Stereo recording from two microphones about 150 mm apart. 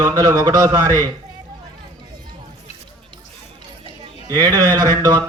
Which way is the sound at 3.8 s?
25° right (ahead or behind).